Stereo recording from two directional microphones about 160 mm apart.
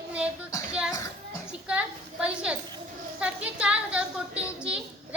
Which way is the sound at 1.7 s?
5° right (ahead or behind).